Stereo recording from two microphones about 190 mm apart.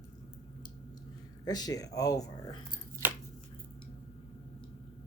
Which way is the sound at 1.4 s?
20° left (ahead or behind).